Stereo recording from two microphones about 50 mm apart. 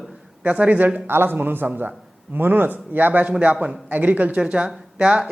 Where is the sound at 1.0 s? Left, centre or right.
Right.